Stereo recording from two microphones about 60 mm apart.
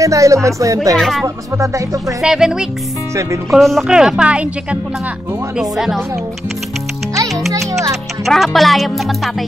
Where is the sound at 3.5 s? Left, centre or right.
Centre.